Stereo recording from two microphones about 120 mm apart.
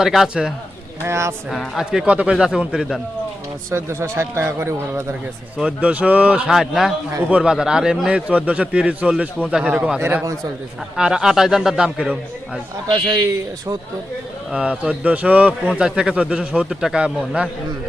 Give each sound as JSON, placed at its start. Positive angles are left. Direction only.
{"t": 0.0, "sound": "speech", "side_deg": 0}
{"t": 1.0, "sound": "speech", "side_deg": -20}
{"t": 1.5, "sound": "speech", "side_deg": -5}
{"t": 3.7, "sound": "speech", "side_deg": -20}
{"t": 5.5, "sound": "a man's voice", "side_deg": -10}
{"t": 10.9, "sound": "speech", "side_deg": -5}
{"t": 12.9, "sound": "a man's voice", "side_deg": -35}
{"t": 14.5, "sound": "a man's voice", "side_deg": -10}